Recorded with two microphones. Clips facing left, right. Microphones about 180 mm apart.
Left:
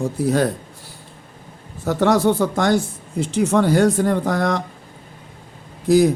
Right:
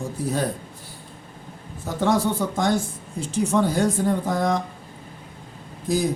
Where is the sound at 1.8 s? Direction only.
75° left (ahead or behind).